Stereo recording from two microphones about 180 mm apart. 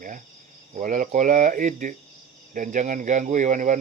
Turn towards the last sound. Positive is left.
turn(degrees=-45)  # may be behind; listen again after turning